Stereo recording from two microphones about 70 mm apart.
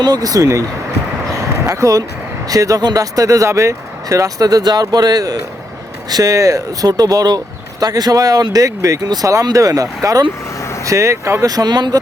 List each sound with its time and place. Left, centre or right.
0.0 s speech: right
1.3 s a sound: right
2.5 s speech: right
6.3 s speech: right
10.6 s vehicle: left
10.8 s speech: right
11.4 s speech: right